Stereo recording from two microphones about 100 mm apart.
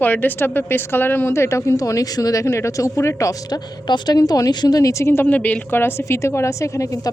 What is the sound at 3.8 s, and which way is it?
Speech, 45° left (ahead or behind).